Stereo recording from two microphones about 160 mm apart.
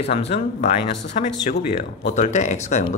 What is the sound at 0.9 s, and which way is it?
Speech, 90° left.